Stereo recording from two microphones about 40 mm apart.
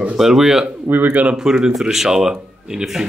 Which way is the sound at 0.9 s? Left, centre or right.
Right.